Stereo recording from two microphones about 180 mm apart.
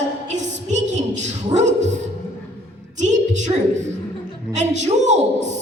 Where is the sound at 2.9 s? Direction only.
40° right (ahead or behind).